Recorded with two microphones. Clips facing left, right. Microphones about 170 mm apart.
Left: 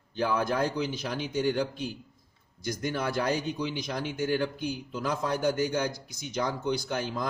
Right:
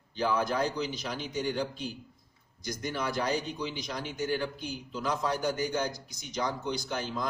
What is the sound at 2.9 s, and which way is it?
A man's voice, 55° left (ahead or behind).